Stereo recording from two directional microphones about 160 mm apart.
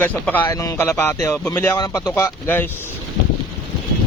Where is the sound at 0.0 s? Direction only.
10° left (ahead or behind).